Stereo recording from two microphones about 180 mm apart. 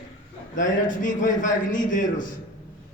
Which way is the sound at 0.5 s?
45° left (ahead or behind).